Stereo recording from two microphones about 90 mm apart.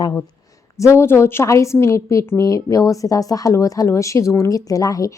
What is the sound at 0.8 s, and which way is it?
A woman's voice, 30° left (ahead or behind).